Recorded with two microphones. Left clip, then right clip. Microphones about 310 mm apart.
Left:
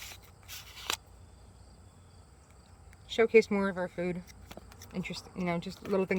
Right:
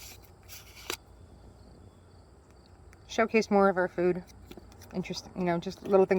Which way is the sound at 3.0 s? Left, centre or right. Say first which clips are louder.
Left 3 dB; centre.